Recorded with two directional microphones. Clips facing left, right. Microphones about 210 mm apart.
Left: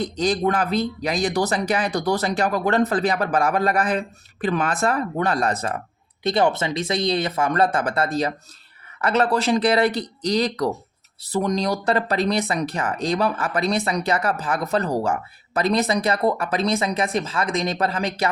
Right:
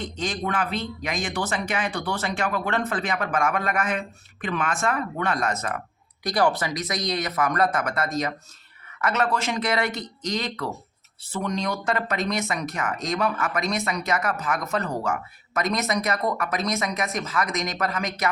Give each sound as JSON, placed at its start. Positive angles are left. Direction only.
{"t": 0.0, "sound": "speech", "side_deg": 40}